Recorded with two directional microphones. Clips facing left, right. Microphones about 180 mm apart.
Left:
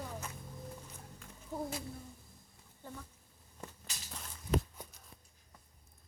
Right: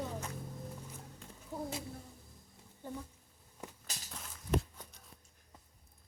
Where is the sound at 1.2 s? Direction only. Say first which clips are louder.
Left 1 dB; 25° right (ahead or behind).